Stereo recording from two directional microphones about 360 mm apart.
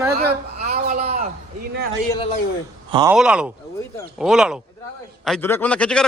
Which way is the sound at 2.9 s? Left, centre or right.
Centre.